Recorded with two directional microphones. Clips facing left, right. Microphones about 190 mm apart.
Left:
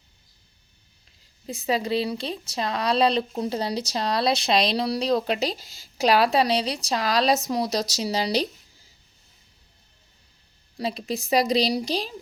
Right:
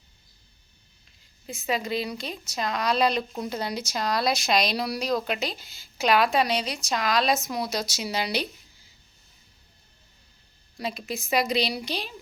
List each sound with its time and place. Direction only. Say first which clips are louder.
1.5 s speech: left 4 dB; 35° left (ahead or behind)
10.8 s speech: left 4 dB; 35° left (ahead or behind)